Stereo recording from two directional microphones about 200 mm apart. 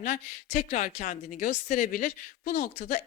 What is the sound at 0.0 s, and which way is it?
Speech, 40° left (ahead or behind).